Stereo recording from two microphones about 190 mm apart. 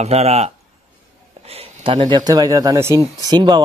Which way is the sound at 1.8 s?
25° right (ahead or behind).